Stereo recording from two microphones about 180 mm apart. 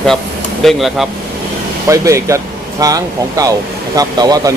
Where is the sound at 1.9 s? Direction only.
15° right (ahead or behind).